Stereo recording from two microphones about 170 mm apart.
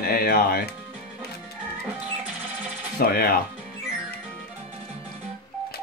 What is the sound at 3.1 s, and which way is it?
Speech, 65° left (ahead or behind).